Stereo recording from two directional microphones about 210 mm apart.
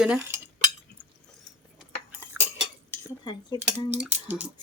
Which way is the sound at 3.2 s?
20° left (ahead or behind).